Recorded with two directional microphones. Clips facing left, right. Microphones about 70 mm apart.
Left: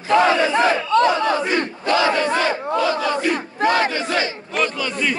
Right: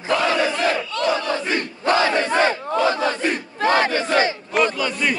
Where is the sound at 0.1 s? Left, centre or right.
Left.